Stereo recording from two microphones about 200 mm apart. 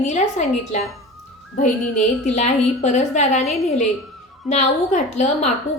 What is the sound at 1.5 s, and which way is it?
A woman's voice, 40° left (ahead or behind).